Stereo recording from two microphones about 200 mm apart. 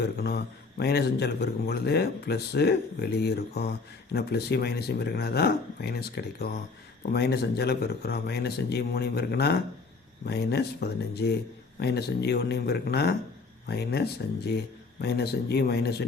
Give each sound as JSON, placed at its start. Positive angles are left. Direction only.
{"t": 0.0, "sound": "speech", "side_deg": 55}